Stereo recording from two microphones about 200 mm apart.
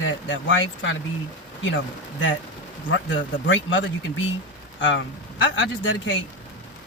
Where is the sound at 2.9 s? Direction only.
70° left (ahead or behind).